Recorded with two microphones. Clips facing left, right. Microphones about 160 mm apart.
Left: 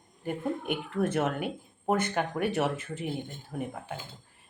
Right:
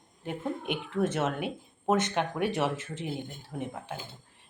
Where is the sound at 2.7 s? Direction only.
90° right.